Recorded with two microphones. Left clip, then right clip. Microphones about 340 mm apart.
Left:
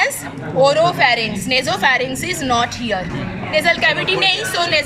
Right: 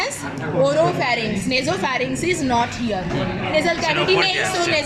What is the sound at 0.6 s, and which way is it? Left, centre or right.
A woman's voice, left.